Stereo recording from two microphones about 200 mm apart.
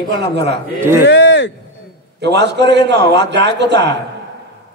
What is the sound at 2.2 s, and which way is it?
A man's voice, 60° right (ahead or behind).